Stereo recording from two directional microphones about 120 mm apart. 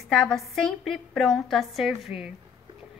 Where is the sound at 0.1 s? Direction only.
5° left (ahead or behind).